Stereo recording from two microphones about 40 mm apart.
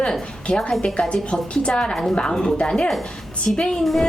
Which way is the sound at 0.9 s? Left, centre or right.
Left.